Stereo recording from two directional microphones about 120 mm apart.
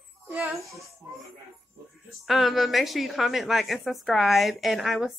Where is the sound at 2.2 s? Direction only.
Centre (ahead or behind).